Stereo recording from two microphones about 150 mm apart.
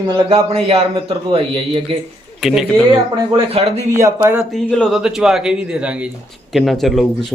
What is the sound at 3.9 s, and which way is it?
Speech, 20° right (ahead or behind).